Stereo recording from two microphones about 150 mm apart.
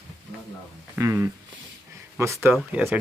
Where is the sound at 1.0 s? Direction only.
15° right (ahead or behind).